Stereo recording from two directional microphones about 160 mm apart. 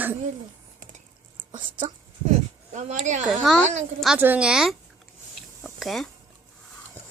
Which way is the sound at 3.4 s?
5° left (ahead or behind).